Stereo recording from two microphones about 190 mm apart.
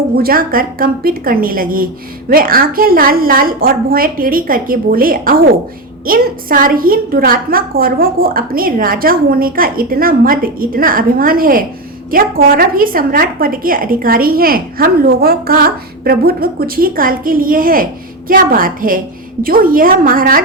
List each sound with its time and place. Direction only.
0.2 s a woman's voice: 50° right (ahead or behind)